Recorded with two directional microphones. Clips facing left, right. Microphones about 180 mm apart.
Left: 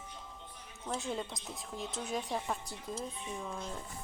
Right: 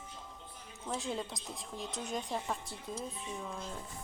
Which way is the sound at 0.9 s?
Centre (ahead or behind).